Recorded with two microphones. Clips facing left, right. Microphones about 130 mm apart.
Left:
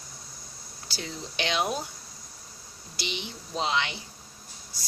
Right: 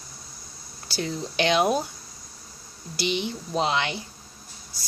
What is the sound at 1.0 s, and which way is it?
Speech, 50° right (ahead or behind).